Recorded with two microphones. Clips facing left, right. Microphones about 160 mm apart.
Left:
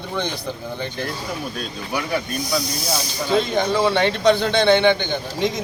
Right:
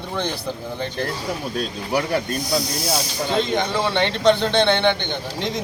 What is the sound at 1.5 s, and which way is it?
Speech, 35° right (ahead or behind).